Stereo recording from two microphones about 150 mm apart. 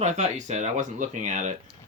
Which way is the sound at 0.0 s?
50° right (ahead or behind).